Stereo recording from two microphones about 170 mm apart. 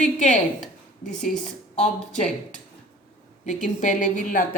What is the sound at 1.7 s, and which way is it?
Speech, 45° left (ahead or behind).